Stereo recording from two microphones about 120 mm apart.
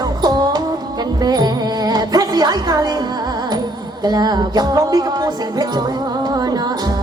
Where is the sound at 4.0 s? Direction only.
35° right (ahead or behind).